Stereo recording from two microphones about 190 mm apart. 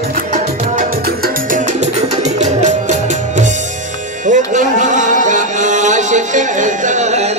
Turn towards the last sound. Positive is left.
turn(degrees=-35)  # may be behind; listen again after turning